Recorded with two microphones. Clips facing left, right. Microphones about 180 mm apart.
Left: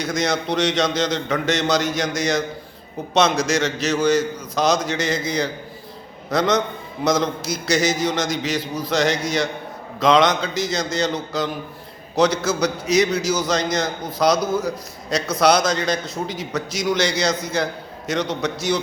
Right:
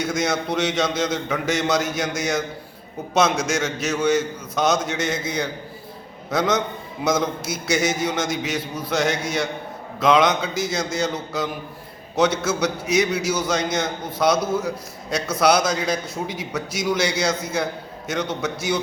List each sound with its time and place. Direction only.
0.0 s a man's voice: 5° right (ahead or behind)
14.3 s a man's voice: 30° right (ahead or behind)
15.1 s a man's voice: 5° right (ahead or behind)